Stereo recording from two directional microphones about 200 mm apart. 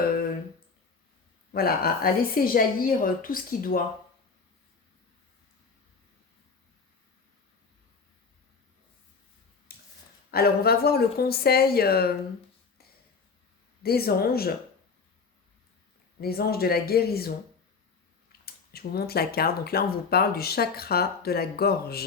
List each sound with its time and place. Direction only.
1.5 s speech: 50° left (ahead or behind)
9.7 s a sound: 50° left (ahead or behind)
10.3 s speech: 50° left (ahead or behind)
13.8 s speech: 50° left (ahead or behind)
16.2 s speech: 50° left (ahead or behind)